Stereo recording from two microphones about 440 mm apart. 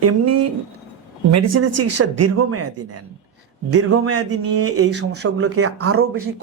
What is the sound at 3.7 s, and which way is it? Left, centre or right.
A man's voice, right.